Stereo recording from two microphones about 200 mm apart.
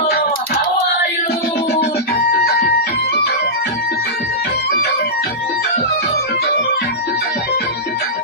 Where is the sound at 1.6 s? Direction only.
55° left (ahead or behind).